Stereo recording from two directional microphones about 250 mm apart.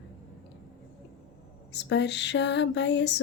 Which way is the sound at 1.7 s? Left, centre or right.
Left.